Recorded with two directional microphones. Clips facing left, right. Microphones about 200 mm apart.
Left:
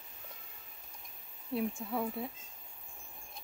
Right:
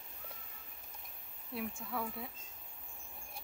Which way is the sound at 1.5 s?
25° left (ahead or behind).